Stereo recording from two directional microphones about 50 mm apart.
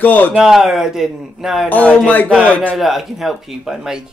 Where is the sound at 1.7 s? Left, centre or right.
Left.